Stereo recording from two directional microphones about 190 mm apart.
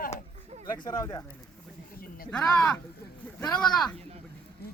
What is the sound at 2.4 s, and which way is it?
Speech, 5° left (ahead or behind).